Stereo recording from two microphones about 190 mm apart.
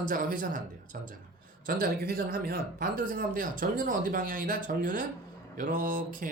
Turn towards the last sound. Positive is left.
turn(degrees=-45)  # may be behind; listen again after turning